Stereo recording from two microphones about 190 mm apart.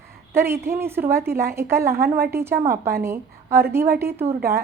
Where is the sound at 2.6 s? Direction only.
55° right (ahead or behind).